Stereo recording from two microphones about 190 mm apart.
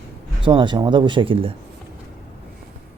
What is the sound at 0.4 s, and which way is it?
Speech, 25° right (ahead or behind).